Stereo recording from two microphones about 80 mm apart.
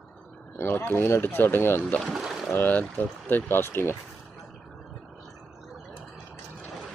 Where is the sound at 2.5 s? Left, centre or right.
Left.